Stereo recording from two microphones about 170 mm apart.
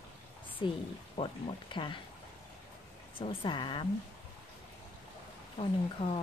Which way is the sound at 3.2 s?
30° left (ahead or behind).